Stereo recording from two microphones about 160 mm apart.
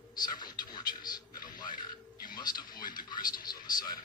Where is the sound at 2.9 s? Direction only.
25° left (ahead or behind).